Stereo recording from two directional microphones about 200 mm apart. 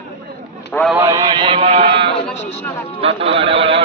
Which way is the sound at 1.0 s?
15° right (ahead or behind).